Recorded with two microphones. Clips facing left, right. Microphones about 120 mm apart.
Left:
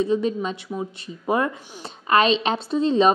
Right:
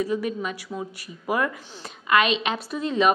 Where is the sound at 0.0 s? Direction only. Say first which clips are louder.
Left 4 dB; 25° left (ahead or behind).